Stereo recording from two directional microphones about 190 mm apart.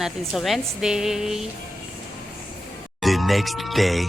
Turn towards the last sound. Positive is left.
turn(degrees=0)  # may be behind; listen again after turning